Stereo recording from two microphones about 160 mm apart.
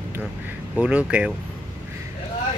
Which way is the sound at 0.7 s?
10° right (ahead or behind).